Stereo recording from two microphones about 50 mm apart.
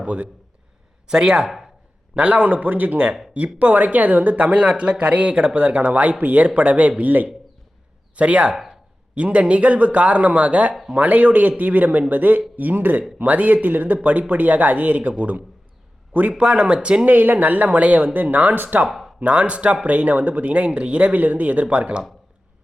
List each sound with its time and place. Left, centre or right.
0.0 s a man's voice: right
1.5 s speech: centre
2.1 s speech: right
6.5 s speech: right
7.1 s speech: right
8.1 s a man's voice: right
17.1 s speech: right
18.9 s a sound: centre
19.2 s speech: right